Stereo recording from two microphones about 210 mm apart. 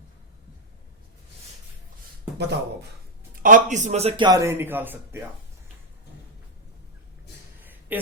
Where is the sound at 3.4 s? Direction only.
40° right (ahead or behind); by 5.2 s 10° right (ahead or behind).